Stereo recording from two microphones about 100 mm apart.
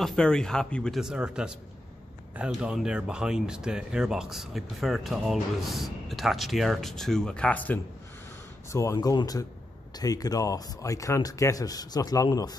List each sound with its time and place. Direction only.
0.0 s speech: 5° left (ahead or behind)
0.9 s speech: 5° right (ahead or behind); by 7.8 s 15° left (ahead or behind)
8.6 s speech: 30° left (ahead or behind)